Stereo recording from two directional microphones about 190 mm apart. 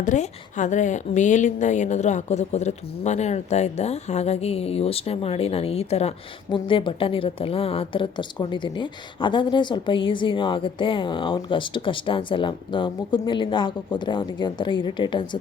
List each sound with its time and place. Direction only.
0.0 s speech: 40° left (ahead or behind); by 15.4 s 25° left (ahead or behind)